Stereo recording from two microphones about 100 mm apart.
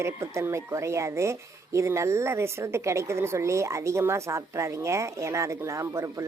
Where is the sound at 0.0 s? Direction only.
30° right (ahead or behind).